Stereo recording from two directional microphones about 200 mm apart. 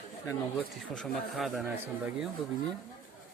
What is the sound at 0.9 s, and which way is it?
Speech, centre (ahead or behind).